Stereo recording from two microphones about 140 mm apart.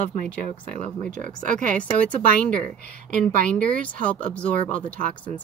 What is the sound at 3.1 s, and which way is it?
Speech, 70° right (ahead or behind).